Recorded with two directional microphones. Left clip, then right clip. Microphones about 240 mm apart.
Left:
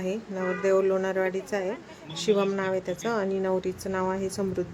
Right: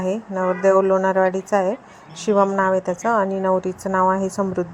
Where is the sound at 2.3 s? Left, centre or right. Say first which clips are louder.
Right 8 dB; centre.